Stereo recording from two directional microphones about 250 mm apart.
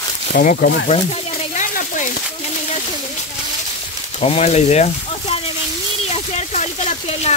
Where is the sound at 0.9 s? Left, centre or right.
Left.